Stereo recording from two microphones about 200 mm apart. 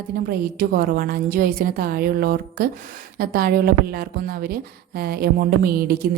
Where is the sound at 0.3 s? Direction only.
45° right (ahead or behind).